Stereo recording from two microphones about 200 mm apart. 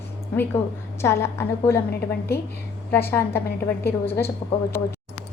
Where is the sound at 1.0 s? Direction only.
10° left (ahead or behind).